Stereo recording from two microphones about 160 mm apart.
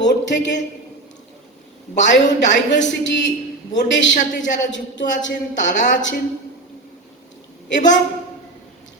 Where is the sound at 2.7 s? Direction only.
90° left.